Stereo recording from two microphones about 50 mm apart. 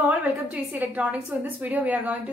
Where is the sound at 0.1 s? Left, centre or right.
Right.